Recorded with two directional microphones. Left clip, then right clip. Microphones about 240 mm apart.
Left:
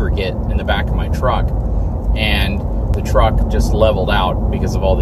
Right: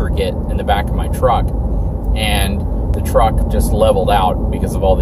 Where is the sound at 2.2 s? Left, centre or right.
Centre.